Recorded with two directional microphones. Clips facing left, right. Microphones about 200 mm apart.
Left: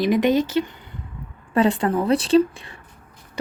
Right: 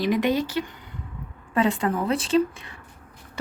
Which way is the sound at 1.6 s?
35° left (ahead or behind).